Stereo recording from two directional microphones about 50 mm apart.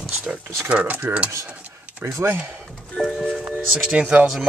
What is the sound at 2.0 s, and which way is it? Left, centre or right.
Speech, right.